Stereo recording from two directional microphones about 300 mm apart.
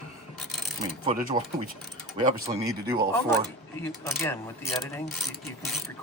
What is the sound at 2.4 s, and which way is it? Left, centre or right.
Speech, centre.